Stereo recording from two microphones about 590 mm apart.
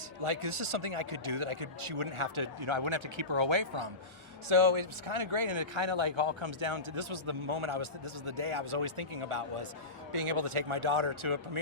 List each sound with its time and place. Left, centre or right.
0.2 s speech: right